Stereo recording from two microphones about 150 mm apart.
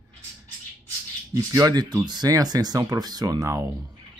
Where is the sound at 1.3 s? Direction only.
25° right (ahead or behind).